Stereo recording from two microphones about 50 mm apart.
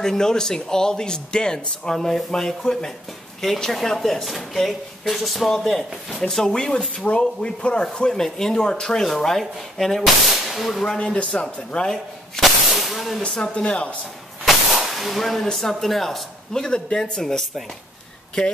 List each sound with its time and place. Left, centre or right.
0.0 s speech: centre
6.3 s speech: centre
11.0 s speech: centre
12.4 s hiss: centre
13.2 s speech: centre
14.8 s a sound: centre
15.7 s speech: centre